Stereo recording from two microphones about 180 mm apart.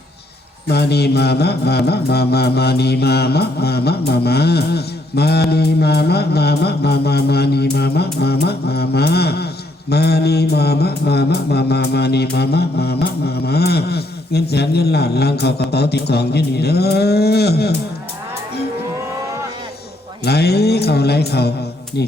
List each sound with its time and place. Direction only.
0.7 s mantra: 65° left (ahead or behind)
20.2 s mantra: 65° left (ahead or behind)